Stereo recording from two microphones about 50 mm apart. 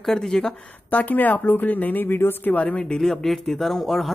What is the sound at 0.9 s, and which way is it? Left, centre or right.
Speech, left.